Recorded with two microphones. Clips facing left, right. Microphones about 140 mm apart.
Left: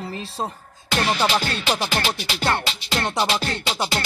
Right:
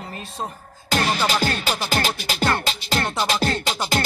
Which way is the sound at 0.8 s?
40° right (ahead or behind).